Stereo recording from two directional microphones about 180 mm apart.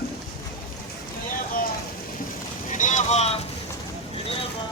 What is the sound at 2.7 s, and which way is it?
Boat, 45° left (ahead or behind).